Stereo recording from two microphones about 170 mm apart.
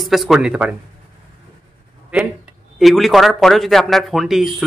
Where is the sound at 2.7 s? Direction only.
Centre (ahead or behind).